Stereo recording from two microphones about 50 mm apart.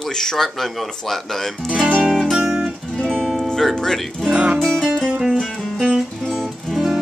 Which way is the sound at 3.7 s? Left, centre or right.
Centre.